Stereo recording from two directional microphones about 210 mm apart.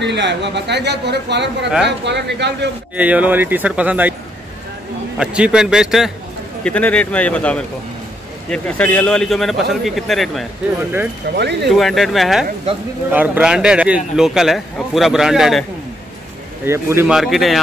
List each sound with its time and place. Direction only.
0.0 s speech: 55° right (ahead or behind)
3.0 s speech: 5° right (ahead or behind)
5.2 s a man's voice: 5° right (ahead or behind)
11.3 s speech: 55° right (ahead or behind)
11.7 s a man's voice: centre (ahead or behind)
16.6 s a man's voice: 10° right (ahead or behind)